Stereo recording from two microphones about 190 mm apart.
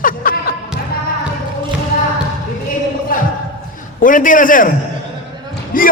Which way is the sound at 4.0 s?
45° left (ahead or behind).